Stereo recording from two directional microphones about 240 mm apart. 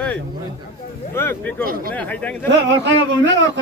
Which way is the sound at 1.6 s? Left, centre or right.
Right.